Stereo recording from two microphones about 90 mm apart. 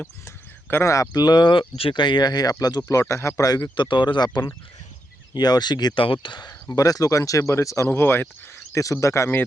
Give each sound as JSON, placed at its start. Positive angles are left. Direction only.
{"t": 0.3, "sound": "a sound", "side_deg": 25}
{"t": 1.1, "sound": "speech", "side_deg": 50}
{"t": 3.8, "sound": "speech", "side_deg": 60}
{"t": 6.0, "sound": "speech", "side_deg": 70}
{"t": 6.5, "sound": "speech", "side_deg": 40}
{"t": 7.9, "sound": "speech", "side_deg": 25}
{"t": 8.7, "sound": "speech", "side_deg": 35}